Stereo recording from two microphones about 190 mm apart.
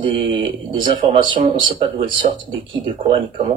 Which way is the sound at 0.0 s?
25° right (ahead or behind).